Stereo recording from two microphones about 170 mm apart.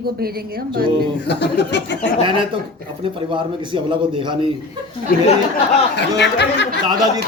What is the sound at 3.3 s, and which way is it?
A man's voice, 30° right (ahead or behind).